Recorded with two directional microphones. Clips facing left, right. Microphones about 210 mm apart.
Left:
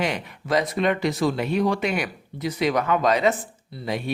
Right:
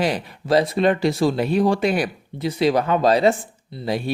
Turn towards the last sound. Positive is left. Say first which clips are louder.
# right 4 dB
turn(degrees=-35)  # may be behind; listen again after turning